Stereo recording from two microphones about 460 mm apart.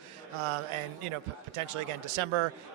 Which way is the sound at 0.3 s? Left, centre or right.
Right.